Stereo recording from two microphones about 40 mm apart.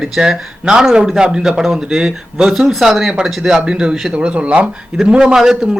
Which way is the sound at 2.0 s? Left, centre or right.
Centre.